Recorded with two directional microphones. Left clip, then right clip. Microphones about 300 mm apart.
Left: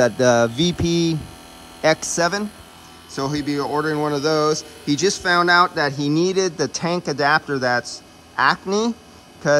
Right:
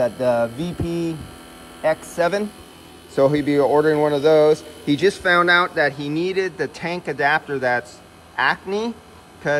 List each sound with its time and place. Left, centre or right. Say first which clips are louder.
0.2 s mantra: left 3 dB; left
3.2 s speech: right 7 dB; centre